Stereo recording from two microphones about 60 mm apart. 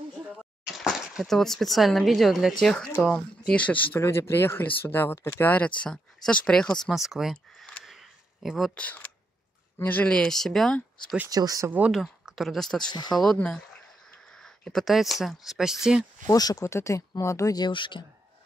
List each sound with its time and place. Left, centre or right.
1.2 s a woman's voice: centre
3.6 s speech: left
4.0 s speech: left
5.4 s speech: left
6.9 s a woman's voice: centre
7.8 s a sound: centre
9.8 s speech: left
10.0 s speech: centre
11.2 s speech: right
11.9 s a woman's voice: centre
14.6 s speech: centre
14.9 s a woman's voice: centre
16.3 s speech: left
16.6 s speech: left